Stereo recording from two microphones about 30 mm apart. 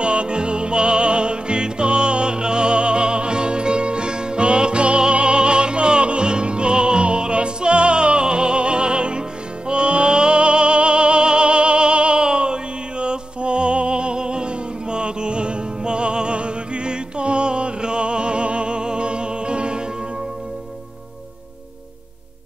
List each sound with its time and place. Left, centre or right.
0.0 s music: right